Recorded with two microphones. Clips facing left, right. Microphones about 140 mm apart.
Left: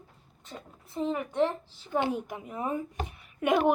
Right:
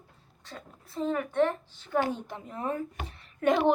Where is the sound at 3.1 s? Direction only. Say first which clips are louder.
Right 1 dB; 10° left (ahead or behind).